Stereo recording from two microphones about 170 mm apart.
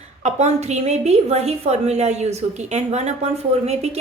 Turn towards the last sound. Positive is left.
turn(degrees=-40)  # may be behind; listen again after turning